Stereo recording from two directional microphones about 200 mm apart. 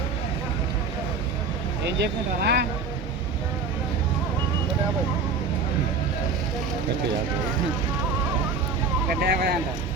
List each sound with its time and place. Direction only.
1.8 s speech: 55° right (ahead or behind)
9.2 s speech: 50° right (ahead or behind)